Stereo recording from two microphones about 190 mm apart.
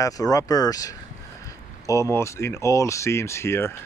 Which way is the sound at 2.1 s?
15° left (ahead or behind).